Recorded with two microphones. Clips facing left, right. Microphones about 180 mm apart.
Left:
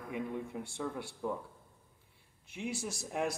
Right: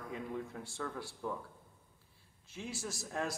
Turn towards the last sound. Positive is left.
turn(degrees=15)  # may be behind; listen again after turning